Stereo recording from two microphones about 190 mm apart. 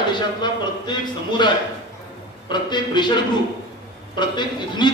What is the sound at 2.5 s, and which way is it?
Speech, 25° left (ahead or behind).